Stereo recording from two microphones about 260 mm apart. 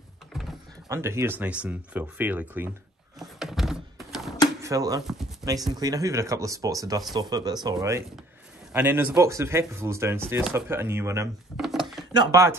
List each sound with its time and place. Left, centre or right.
0.8 s speech: centre
3.2 s thunk: centre
4.6 s speech: centre
5.0 s speech: centre
5.4 s speech: centre
11.6 s a sound: centre
12.1 s speech: centre